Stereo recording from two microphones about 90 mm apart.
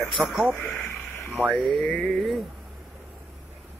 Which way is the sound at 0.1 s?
Centre (ahead or behind).